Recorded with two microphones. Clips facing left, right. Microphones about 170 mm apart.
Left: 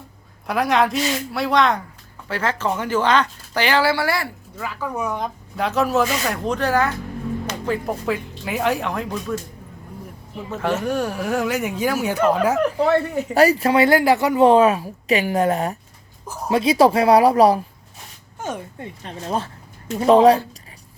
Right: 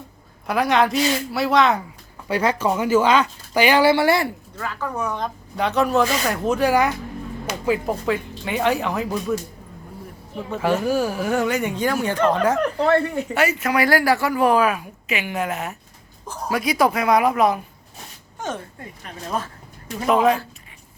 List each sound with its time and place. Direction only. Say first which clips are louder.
0.4 s speech: even; centre (ahead or behind)
2.2 s speech: right 3 dB; 15° right (ahead or behind)
4.5 s speech: left 3 dB; 10° left (ahead or behind)
10.5 s speech: right 2 dB; centre (ahead or behind)
13.3 s a woman's voice: left 6 dB; 35° left (ahead or behind)
16.2 s a sound: even; 5° left (ahead or behind)
16.5 s a woman's voice: left 5 dB; 25° left (ahead or behind)
18.3 s a sound: even; 10° left (ahead or behind)
18.8 s a woman's voice: left 3 dB; 30° left (ahead or behind)